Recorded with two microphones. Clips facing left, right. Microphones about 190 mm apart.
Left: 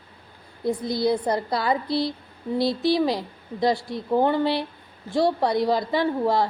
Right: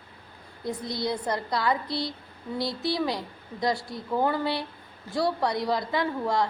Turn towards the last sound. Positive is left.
turn(degrees=30)  # may be behind; listen again after turning